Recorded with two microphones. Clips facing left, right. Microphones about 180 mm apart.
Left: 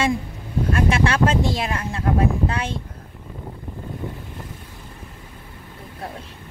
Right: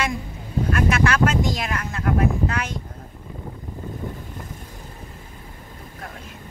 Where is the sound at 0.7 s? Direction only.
30° left (ahead or behind).